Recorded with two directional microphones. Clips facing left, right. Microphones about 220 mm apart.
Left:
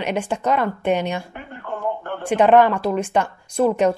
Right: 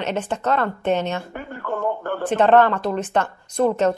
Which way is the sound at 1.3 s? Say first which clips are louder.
Right 4 dB; 45° right (ahead or behind).